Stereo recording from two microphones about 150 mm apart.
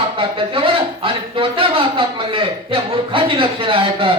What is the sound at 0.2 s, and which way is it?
Speech, 35° right (ahead or behind).